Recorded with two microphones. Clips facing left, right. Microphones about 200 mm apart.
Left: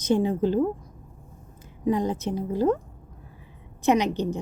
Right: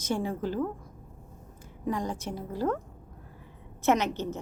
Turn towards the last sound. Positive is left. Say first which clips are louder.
# left 4 dB
turn(degrees=15)  # may be behind; listen again after turning